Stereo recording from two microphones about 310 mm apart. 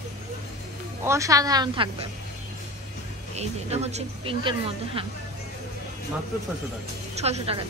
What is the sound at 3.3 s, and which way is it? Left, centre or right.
A woman's voice, right.